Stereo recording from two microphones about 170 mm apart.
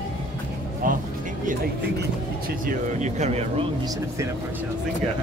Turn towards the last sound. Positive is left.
turn(degrees=-45)  # may be behind; listen again after turning